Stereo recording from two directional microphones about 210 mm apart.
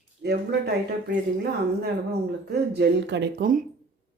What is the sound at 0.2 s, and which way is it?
Speech, 50° right (ahead or behind).